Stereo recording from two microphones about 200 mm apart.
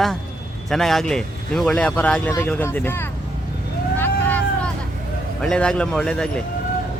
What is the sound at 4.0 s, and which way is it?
Vehicle, 10° left (ahead or behind).